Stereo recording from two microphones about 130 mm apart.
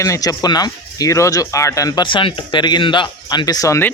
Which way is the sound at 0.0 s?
25° left (ahead or behind).